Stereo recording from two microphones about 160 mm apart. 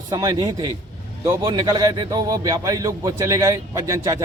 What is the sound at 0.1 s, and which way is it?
A man's voice, 25° right (ahead or behind).